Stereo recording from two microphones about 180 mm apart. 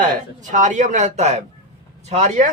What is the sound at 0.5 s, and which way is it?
Speech, 45° right (ahead or behind).